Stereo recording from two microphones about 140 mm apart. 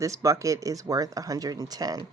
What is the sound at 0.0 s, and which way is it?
Speech, 20° right (ahead or behind).